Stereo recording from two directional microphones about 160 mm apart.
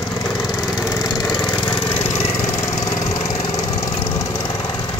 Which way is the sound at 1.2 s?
5° left (ahead or behind).